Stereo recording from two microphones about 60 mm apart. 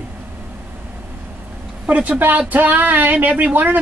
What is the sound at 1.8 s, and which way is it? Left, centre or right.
Speech, right.